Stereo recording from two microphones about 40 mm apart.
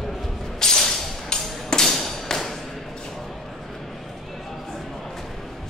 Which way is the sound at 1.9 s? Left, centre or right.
Centre.